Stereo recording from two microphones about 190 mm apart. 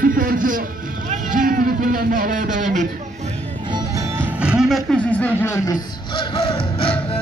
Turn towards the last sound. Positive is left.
turn(degrees=30)  # may be behind; listen again after turning